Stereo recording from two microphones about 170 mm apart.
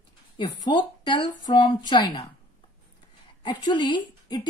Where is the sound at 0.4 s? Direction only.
25° left (ahead or behind).